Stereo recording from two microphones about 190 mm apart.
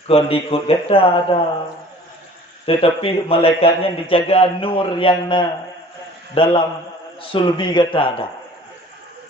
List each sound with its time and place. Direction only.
0.1 s speech: 30° left (ahead or behind)
2.6 s speech: 30° left (ahead or behind)